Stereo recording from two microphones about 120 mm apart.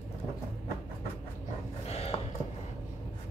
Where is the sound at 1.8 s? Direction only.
60° left (ahead or behind).